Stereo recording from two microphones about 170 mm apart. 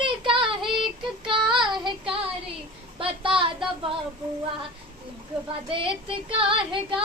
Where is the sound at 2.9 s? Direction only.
30° right (ahead or behind).